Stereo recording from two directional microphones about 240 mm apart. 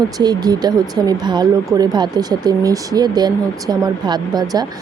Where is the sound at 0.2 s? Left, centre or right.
Centre.